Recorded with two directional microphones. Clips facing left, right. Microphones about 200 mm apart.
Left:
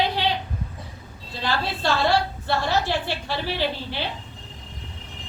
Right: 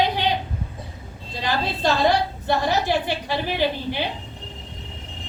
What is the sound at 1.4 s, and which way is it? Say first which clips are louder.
A woman's voice: right 2 dB; 15° right (ahead or behind).